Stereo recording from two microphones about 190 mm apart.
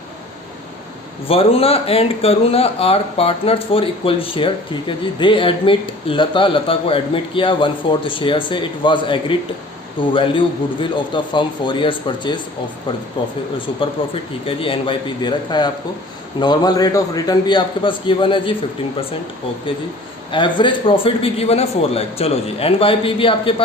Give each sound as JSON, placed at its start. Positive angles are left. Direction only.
{"t": 1.3, "sound": "speech", "side_deg": 30}
{"t": 20.3, "sound": "speech", "side_deg": 25}